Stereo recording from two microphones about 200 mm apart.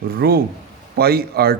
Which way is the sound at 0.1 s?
50° right (ahead or behind).